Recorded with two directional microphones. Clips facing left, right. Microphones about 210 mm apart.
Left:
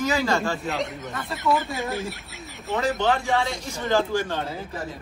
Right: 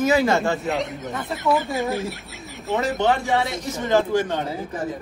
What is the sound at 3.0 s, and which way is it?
Speech, 20° right (ahead or behind).